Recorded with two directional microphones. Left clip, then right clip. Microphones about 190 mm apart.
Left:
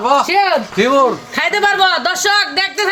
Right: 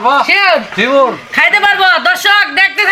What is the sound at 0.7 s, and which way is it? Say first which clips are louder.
Speech: right 2 dB; 35° left (ahead or behind).